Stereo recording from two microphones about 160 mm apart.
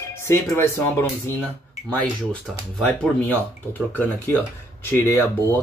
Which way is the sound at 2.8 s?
5° left (ahead or behind).